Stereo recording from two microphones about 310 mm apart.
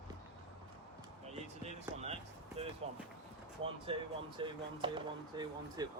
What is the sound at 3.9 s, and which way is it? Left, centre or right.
Speech, centre.